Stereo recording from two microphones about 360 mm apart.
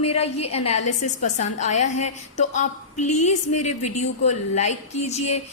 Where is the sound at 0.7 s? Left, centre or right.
Left.